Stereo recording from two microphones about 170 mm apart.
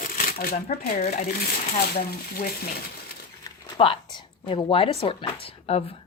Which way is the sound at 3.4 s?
25° left (ahead or behind).